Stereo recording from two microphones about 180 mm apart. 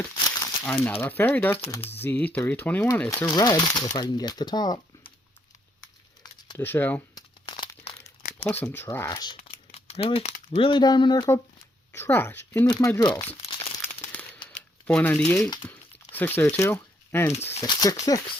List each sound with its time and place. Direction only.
0.3 s crumpling: 20° left (ahead or behind)
0.6 s speech: 10° left (ahead or behind)
6.6 s speech: 10° left (ahead or behind)
7.2 s crumpling: 25° left (ahead or behind)
8.4 s speech: 10° left (ahead or behind)
11.9 s speech: 10° left (ahead or behind)
12.6 s speech: 20° left (ahead or behind)
14.1 s crumpling: 10° left (ahead or behind)
14.8 s speech: 10° left (ahead or behind)
17.3 s speech: 35° left (ahead or behind)
17.6 s speech: 20° left (ahead or behind)